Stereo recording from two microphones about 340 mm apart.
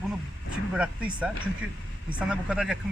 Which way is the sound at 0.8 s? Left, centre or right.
Centre.